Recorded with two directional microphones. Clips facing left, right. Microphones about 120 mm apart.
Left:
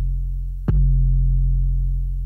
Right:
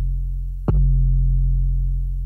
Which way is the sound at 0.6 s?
35° right (ahead or behind).